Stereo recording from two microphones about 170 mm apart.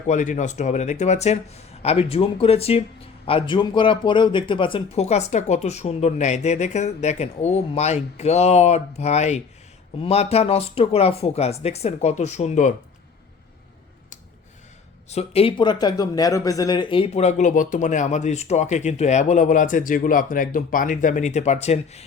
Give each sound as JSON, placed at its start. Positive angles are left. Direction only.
{"t": 0.1, "sound": "a man's voice", "side_deg": 45}
{"t": 15.1, "sound": "speech", "side_deg": 35}